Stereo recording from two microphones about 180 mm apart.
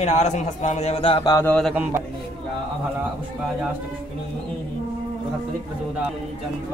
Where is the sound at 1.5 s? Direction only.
Centre (ahead or behind).